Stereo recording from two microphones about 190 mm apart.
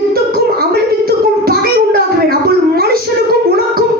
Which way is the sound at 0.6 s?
55° right (ahead or behind).